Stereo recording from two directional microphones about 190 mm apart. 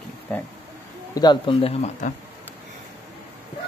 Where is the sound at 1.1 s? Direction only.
20° left (ahead or behind).